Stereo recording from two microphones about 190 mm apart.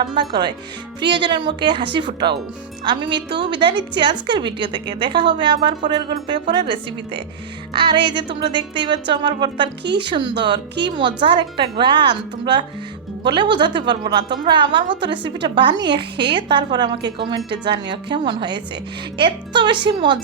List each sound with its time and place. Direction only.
0.0 s speech: 25° right (ahead or behind)
7.7 s speech: 25° right (ahead or behind)